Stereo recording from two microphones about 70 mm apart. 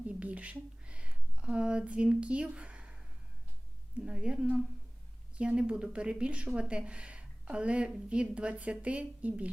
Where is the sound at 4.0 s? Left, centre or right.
Centre.